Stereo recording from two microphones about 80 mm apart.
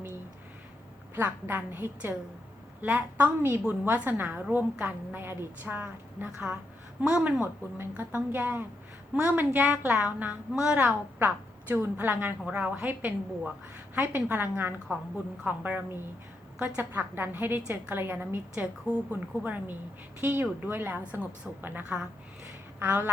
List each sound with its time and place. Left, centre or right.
1.1 s a woman's voice: right
7.0 s speech: centre
7.9 s a woman's voice: right
11.7 s a woman's voice: right
18.5 s a woman's voice: centre